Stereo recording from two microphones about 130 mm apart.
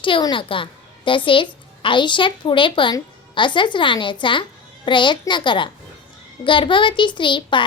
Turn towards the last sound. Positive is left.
turn(degrees=40)  # may be behind; listen again after turning